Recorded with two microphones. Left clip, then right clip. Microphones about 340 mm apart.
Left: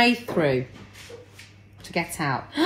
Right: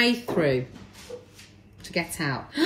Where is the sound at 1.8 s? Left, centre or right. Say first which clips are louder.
Left 2 dB; centre.